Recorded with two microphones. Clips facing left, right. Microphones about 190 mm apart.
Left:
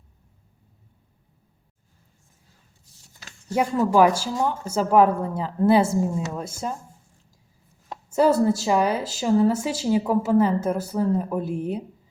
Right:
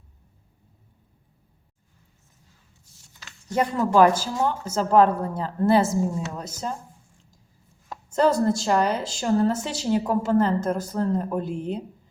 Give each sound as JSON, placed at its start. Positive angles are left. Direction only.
{"t": 3.5, "sound": "speech", "side_deg": 10}
{"t": 8.1, "sound": "speech", "side_deg": 10}